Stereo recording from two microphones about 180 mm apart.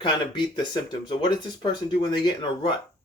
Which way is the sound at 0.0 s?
25° left (ahead or behind).